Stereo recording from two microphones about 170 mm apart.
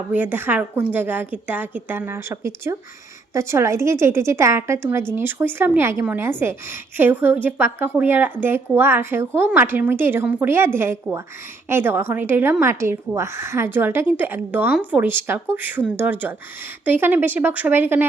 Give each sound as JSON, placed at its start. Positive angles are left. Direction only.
{"t": 0.1, "sound": "a woman's voice", "side_deg": -10}
{"t": 11.7, "sound": "a woman's voice", "side_deg": -15}